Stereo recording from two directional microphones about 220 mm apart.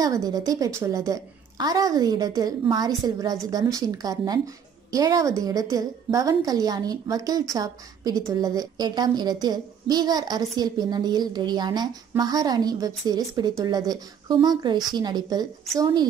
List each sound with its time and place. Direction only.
0.0 s a woman's voice: 15° right (ahead or behind)